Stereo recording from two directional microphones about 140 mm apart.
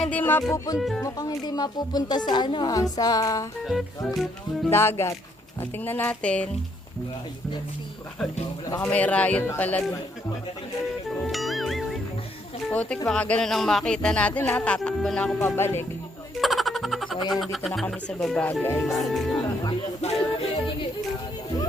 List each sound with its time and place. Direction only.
0.0 s music: 10° left (ahead or behind)
0.8 s speech: centre (ahead or behind)
1.0 s speech: 25° left (ahead or behind)
3.7 s music: centre (ahead or behind)
4.7 s speech: 20° left (ahead or behind)
8.8 s speech: 10° left (ahead or behind)
11.3 s music: centre (ahead or behind)
12.7 s speech: 10° left (ahead or behind)
13.1 s music: 10° left (ahead or behind)
15.4 s speech: 15° left (ahead or behind)
16.4 s music: centre (ahead or behind)
18.8 s music: centre (ahead or behind)
20.0 s music: 50° left (ahead or behind)